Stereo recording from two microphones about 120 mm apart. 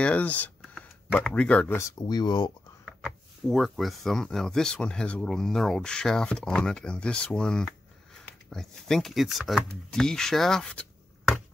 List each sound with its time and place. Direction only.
0.0 s speech: 10° left (ahead or behind)
0.6 s a sound: 5° left (ahead or behind)
1.8 s speech: 30° left (ahead or behind)
2.8 s speech: centre (ahead or behind)